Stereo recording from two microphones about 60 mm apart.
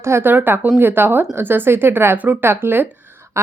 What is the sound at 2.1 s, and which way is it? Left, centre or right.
Speech, right.